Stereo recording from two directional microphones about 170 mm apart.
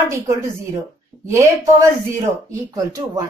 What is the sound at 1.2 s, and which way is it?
Speech, 15° right (ahead or behind).